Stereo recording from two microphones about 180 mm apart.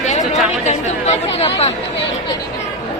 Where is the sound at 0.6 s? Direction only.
35° left (ahead or behind).